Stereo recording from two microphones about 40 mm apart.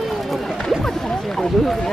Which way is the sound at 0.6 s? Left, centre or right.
Centre.